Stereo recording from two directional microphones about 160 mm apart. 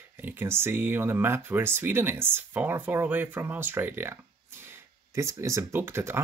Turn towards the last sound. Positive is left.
turn(degrees=-15)  # may be behind; listen again after turning